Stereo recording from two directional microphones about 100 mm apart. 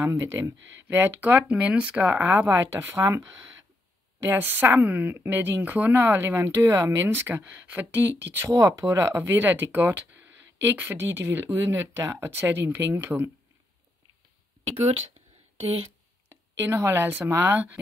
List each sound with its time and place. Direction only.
0.0 s speech: 25° right (ahead or behind)
4.2 s speech: 20° right (ahead or behind)
7.2 s speech: 20° right (ahead or behind)
8.5 s speech: 35° right (ahead or behind)
14.7 s speech: 90° right
16.3 s speech: 25° right (ahead or behind)